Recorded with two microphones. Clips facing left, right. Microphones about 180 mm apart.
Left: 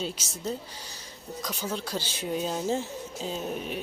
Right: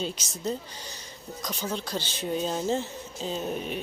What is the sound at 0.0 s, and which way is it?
Speech, 5° left (ahead or behind).